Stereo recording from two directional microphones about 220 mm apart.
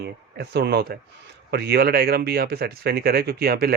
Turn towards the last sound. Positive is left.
turn(degrees=-45)  # may be behind; listen again after turning